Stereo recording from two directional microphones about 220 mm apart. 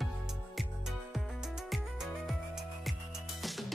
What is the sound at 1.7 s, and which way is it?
Music, centre (ahead or behind).